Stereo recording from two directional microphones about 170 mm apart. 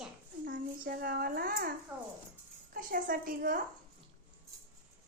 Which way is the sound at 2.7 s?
55° right (ahead or behind).